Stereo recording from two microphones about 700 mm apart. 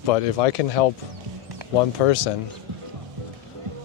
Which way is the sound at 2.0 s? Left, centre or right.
Left.